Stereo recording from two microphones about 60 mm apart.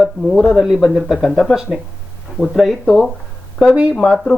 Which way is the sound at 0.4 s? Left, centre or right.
Centre.